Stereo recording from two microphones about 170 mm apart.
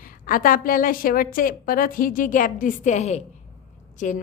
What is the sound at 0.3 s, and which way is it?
A woman's voice, 55° left (ahead or behind).